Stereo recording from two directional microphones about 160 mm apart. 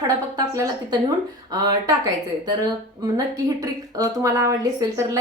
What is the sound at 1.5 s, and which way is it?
Speech, 25° right (ahead or behind).